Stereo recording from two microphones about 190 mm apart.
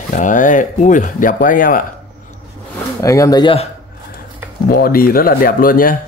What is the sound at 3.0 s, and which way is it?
Speech, 15° left (ahead or behind).